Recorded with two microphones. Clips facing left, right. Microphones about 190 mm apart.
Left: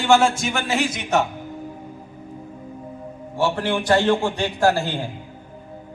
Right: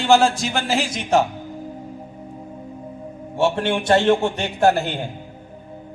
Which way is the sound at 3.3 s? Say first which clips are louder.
Right 2 dB; 25° right (ahead or behind).